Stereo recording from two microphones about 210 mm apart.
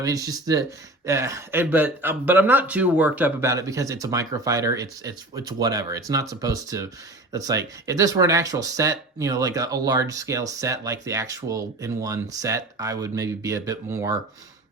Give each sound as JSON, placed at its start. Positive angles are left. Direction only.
{"t": 0.0, "sound": "speech", "side_deg": -15}